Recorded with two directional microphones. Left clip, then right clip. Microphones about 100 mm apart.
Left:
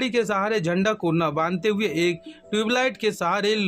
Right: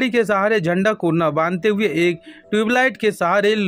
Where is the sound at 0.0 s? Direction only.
45° right (ahead or behind).